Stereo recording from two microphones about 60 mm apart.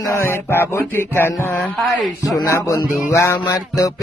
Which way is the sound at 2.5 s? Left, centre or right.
Left.